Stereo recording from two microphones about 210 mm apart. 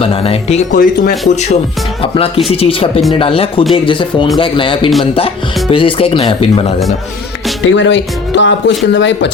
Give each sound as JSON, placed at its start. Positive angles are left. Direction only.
{"t": 0.0, "sound": "speech", "side_deg": 25}
{"t": 2.0, "sound": "speech", "side_deg": 25}
{"t": 7.6, "sound": "speech", "side_deg": 65}